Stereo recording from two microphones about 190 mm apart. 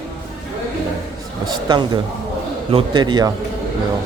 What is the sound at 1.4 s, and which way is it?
A man's voice, 25° right (ahead or behind).